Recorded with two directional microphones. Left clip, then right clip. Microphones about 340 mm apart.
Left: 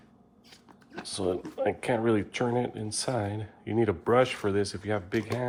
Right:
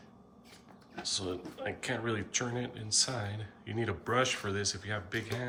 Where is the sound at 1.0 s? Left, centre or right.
Centre.